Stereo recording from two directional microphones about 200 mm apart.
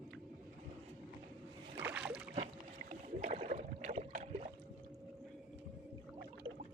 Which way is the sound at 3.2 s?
35° right (ahead or behind).